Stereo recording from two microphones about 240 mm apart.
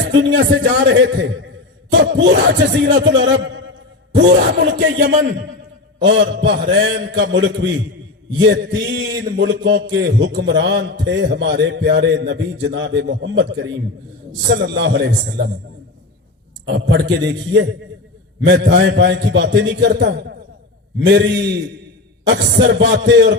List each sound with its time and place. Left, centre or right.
0.0 s a man's voice: right
16.6 s a man's voice: right